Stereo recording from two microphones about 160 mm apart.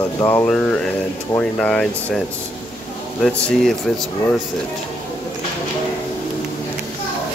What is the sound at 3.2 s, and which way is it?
Speech, centre (ahead or behind).